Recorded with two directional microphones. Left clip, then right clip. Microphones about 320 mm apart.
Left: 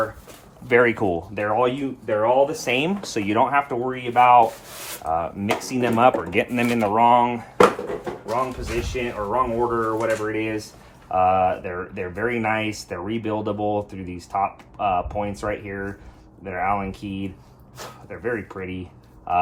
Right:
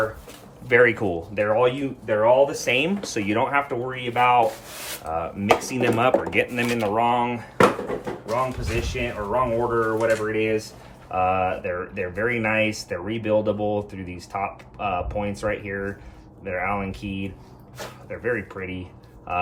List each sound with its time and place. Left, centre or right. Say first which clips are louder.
0.7 s speech: even; centre